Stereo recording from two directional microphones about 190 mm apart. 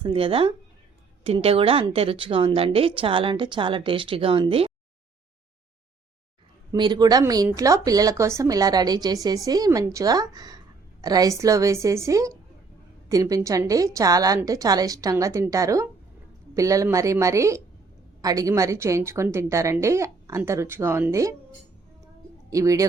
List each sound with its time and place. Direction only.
0.0 s speech: 30° right (ahead or behind)
6.7 s a woman's voice: 25° right (ahead or behind)
22.4 s speech: 15° right (ahead or behind)